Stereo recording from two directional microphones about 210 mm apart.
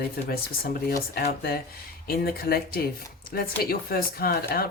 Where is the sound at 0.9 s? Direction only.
45° left (ahead or behind).